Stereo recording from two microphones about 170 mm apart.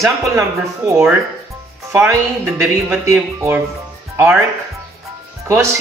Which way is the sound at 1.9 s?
15° right (ahead or behind).